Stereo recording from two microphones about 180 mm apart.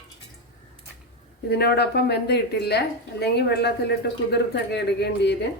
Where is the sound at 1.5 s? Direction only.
65° left (ahead or behind).